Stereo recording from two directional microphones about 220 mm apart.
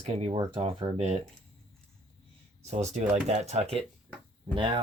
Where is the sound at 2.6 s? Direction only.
30° right (ahead or behind).